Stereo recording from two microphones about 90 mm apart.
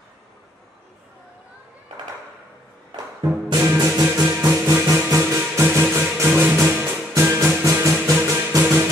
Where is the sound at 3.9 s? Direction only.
30° right (ahead or behind).